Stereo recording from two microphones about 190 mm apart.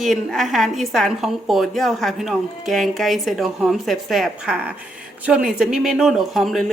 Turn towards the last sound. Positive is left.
turn(degrees=0)  # may be behind; listen again after turning